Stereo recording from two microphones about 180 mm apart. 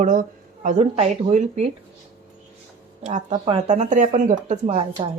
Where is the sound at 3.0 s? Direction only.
40° right (ahead or behind).